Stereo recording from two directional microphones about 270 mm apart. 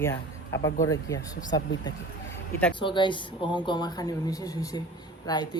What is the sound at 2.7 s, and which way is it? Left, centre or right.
Speech, centre.